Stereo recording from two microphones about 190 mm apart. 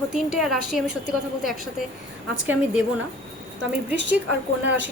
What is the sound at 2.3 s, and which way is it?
Speech, 5° right (ahead or behind).